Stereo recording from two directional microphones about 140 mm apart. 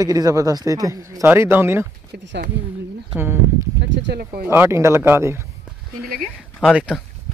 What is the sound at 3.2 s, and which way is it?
Speech, 15° right (ahead or behind).